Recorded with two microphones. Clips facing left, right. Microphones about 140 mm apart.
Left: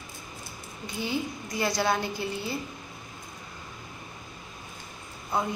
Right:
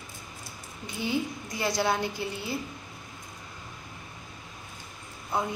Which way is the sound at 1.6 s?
20° right (ahead or behind).